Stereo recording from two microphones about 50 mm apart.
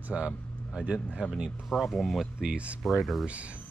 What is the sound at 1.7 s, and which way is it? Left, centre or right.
Speech, centre.